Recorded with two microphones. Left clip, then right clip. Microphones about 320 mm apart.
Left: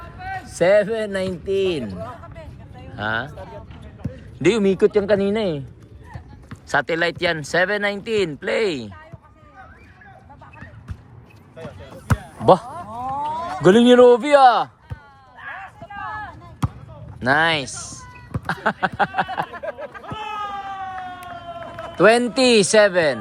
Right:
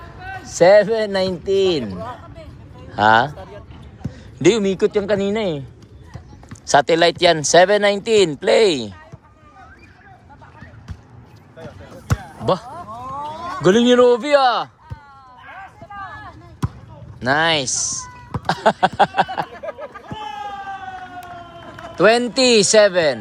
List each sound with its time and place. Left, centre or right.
0.4 s speech: centre
4.0 s speech: centre
12.7 s a sound: left
13.6 s speech: centre
17.2 s speech: centre
19.5 s a sound: left
21.9 s speech: centre